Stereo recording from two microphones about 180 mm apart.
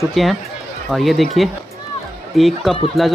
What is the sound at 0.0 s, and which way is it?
Speech, centre (ahead or behind).